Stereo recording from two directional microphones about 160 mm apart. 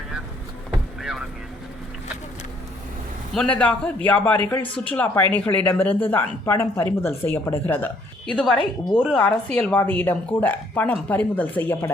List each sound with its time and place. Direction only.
1.0 s vehicle: 5° right (ahead or behind)
3.3 s speech: 5° left (ahead or behind)
8.3 s a woman's voice: 5° left (ahead or behind)
8.5 s a woman's voice: 30° left (ahead or behind)
9.0 s speech: 5° left (ahead or behind)